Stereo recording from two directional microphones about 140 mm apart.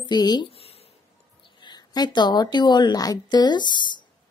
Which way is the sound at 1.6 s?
30° left (ahead or behind).